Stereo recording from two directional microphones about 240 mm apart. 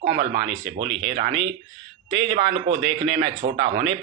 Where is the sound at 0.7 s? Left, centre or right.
Right.